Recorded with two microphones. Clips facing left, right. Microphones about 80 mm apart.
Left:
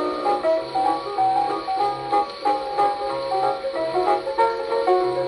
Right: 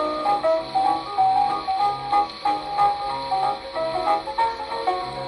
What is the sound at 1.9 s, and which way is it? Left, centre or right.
Music, centre.